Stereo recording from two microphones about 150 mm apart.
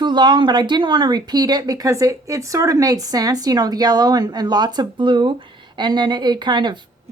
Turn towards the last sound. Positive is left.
turn(degrees=-30)  # may be behind; listen again after turning